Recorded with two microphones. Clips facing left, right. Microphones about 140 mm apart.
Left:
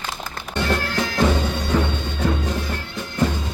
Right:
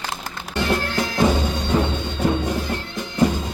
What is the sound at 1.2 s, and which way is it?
Music, 10° right (ahead or behind).